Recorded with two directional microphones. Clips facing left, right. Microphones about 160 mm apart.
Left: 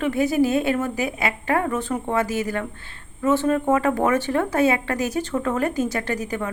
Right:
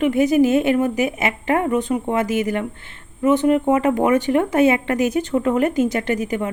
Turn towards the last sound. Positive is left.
turn(degrees=-20)  # may be behind; listen again after turning